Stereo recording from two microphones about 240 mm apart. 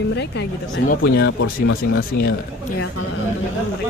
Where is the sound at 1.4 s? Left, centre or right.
Left.